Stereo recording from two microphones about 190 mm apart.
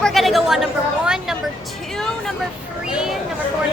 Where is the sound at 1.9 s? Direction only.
Centre (ahead or behind).